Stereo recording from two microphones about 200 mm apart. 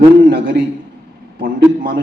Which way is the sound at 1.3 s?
50° right (ahead or behind).